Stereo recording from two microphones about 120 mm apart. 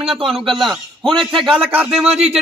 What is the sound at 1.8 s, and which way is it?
Speech, 55° right (ahead or behind).